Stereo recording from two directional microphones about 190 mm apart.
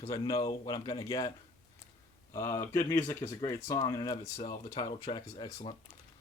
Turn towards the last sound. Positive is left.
turn(degrees=20)  # may be behind; listen again after turning